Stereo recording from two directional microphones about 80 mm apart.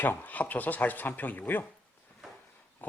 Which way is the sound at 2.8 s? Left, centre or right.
Left.